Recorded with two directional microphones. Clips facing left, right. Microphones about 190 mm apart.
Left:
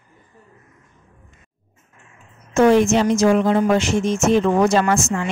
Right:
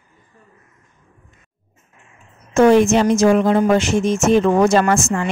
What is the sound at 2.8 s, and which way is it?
A woman's voice, 50° right (ahead or behind).